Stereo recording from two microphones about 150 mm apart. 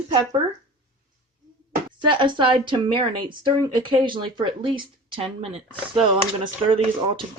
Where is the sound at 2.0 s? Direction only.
35° right (ahead or behind).